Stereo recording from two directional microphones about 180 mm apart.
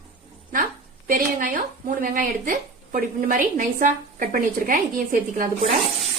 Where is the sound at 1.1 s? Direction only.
50° right (ahead or behind).